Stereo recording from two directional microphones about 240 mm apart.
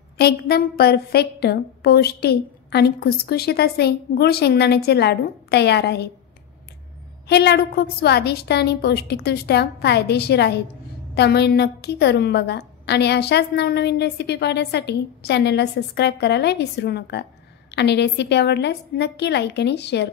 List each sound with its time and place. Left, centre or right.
0.2 s a woman's voice: left
7.2 s a woman's voice: left